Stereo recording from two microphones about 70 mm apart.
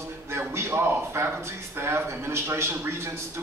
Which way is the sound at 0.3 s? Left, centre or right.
Right.